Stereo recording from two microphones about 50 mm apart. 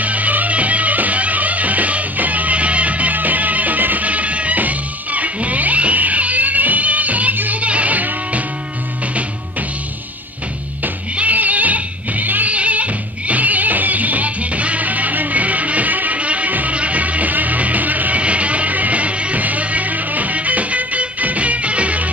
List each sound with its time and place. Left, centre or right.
0.0 s music: right
11.1 s music: right